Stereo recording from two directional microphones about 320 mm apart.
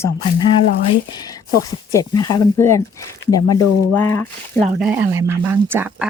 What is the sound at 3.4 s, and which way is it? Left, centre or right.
Speech, left.